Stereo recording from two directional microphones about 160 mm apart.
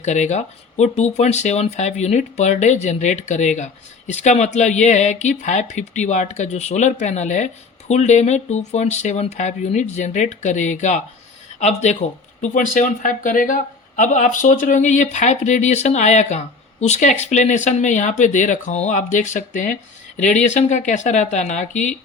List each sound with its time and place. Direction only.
0.0 s speech: 45° left (ahead or behind)
12.4 s speech: 55° left (ahead or behind)